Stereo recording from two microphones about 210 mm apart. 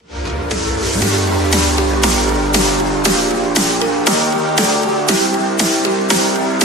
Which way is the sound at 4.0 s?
Centre (ahead or behind).